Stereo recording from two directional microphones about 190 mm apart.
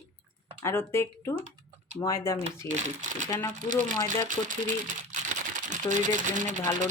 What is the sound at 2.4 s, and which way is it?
Speech, 40° right (ahead or behind).